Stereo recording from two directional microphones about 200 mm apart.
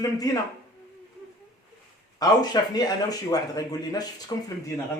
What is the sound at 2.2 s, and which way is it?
Speech, 20° left (ahead or behind).